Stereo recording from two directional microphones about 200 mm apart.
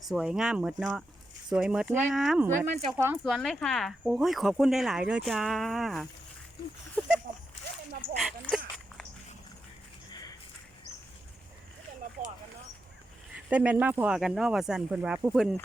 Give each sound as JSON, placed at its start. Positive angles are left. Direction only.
{"t": 0.1, "sound": "speech", "side_deg": 0}
{"t": 8.2, "sound": "dog", "side_deg": 0}
{"t": 10.1, "sound": "a sound", "side_deg": 20}
{"t": 13.3, "sound": "speech", "side_deg": -5}